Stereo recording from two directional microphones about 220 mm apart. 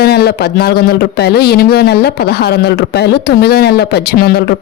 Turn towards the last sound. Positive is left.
turn(degrees=45)  # may be behind; listen again after turning